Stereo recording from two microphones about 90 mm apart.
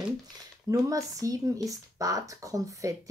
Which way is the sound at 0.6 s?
35° right (ahead or behind).